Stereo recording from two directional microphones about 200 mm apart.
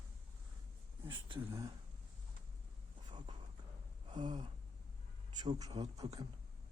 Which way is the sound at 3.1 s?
25° right (ahead or behind).